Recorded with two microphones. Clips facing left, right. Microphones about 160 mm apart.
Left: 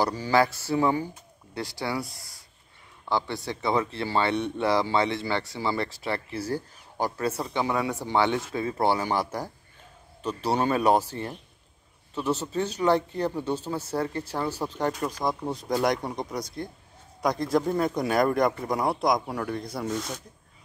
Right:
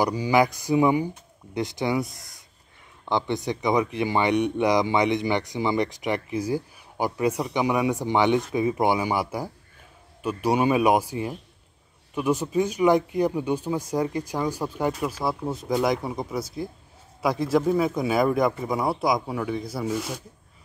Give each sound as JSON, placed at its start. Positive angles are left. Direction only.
{"t": 0.0, "sound": "speech", "side_deg": -15}